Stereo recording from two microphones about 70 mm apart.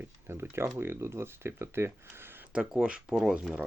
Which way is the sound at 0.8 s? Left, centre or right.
Right.